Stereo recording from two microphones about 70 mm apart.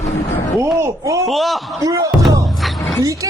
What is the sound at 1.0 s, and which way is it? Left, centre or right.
Speech, right.